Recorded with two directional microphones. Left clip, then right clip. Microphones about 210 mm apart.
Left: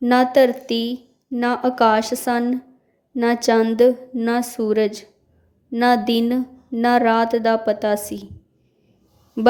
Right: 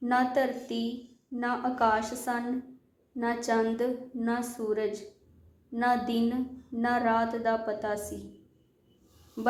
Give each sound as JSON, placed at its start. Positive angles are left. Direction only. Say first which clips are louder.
{"t": 0.0, "sound": "speech", "louder": "left 12 dB", "side_deg": 50}